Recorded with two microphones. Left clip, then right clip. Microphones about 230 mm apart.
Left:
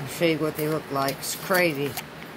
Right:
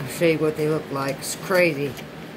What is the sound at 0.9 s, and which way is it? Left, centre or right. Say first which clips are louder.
Speech: even; centre.